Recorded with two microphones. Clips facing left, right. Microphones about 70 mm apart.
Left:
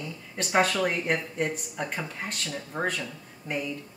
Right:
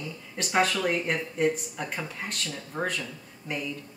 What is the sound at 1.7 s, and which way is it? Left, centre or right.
Speech, centre.